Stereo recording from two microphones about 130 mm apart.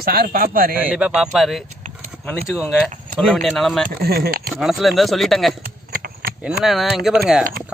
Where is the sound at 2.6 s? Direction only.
5° left (ahead or behind).